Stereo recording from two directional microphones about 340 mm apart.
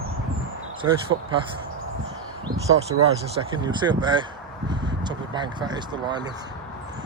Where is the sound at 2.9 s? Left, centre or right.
Right.